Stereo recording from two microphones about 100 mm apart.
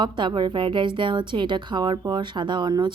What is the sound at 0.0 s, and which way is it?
A woman's voice, 50° right (ahead or behind).